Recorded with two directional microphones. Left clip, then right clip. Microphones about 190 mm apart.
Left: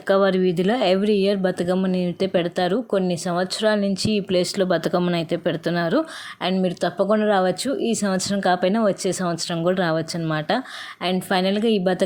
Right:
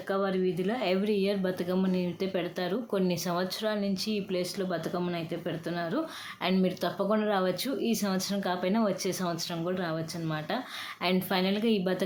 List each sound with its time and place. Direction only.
0.1 s speech: 50° left (ahead or behind)
6.4 s speech: 30° left (ahead or behind)